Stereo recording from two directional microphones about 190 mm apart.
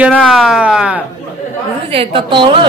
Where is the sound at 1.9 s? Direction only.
30° right (ahead or behind).